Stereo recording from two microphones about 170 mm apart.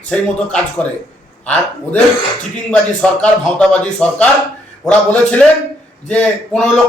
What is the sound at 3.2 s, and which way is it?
A man's voice, 5° left (ahead or behind).